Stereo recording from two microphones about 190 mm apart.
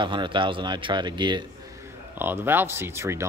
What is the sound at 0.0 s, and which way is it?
Speech, 25° right (ahead or behind).